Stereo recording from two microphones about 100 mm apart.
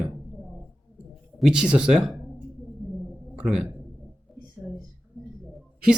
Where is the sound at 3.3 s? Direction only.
10° right (ahead or behind).